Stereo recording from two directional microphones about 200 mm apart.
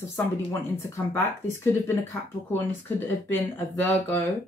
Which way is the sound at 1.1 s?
10° left (ahead or behind).